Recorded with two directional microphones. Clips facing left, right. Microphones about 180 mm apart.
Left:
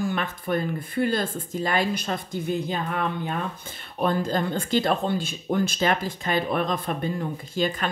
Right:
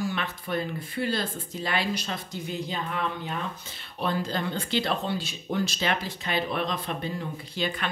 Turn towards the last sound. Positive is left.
turn(degrees=45)  # may be behind; listen again after turning